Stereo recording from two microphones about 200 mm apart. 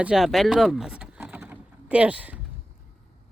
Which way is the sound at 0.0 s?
Centre (ahead or behind).